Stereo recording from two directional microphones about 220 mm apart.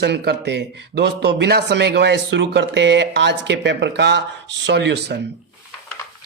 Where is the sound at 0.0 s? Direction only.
50° right (ahead or behind).